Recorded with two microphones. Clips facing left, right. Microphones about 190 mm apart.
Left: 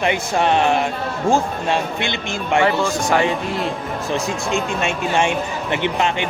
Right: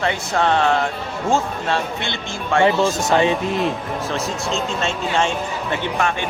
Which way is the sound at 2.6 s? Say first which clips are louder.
Right 5 dB; 20° right (ahead or behind).